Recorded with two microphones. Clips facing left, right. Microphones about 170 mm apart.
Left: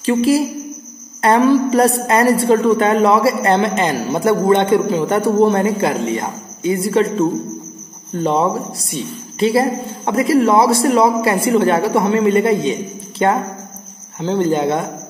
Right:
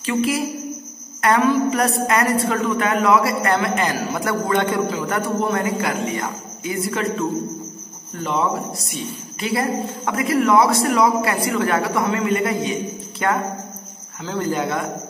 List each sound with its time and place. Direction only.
0.0 s a woman's voice: 30° left (ahead or behind)